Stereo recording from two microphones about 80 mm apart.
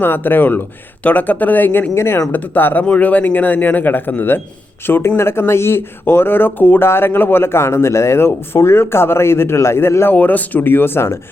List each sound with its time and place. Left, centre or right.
0.0 s speech: left
2.3 s speech: left